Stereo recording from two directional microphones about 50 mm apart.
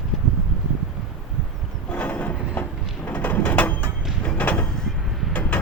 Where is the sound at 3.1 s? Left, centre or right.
Left.